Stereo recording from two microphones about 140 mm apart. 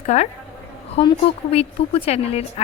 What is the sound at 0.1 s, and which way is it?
Speech, 55° left (ahead or behind).